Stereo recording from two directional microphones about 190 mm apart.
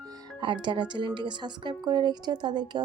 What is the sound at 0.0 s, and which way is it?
Speech, 20° right (ahead or behind).